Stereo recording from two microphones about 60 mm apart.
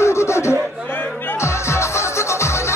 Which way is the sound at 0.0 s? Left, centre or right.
Left.